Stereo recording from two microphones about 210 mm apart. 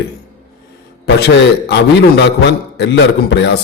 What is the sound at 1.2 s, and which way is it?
A man's voice, 55° left (ahead or behind).